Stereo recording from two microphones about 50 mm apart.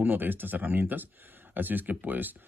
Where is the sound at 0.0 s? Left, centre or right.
Right.